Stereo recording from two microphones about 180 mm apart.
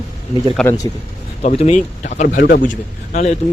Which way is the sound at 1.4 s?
35° left (ahead or behind).